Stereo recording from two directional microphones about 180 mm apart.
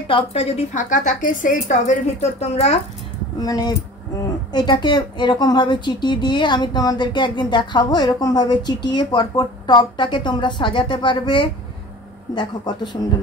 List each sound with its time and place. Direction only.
0.1 s speech: 35° left (ahead or behind)
3.3 s a woman's voice: 20° left (ahead or behind)